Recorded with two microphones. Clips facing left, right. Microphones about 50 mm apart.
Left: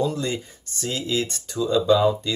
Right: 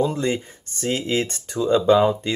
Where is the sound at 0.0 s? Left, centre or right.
Right.